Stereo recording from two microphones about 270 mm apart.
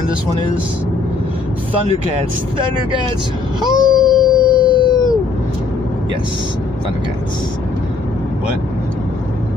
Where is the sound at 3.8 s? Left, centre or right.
Centre.